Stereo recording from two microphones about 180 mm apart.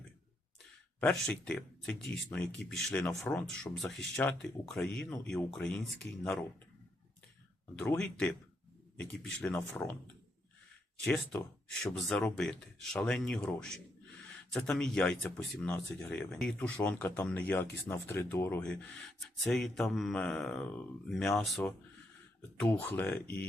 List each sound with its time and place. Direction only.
1.3 s speech: 5° left (ahead or behind)
7.8 s speech: 5° left (ahead or behind)
11.0 s speech: 5° left (ahead or behind)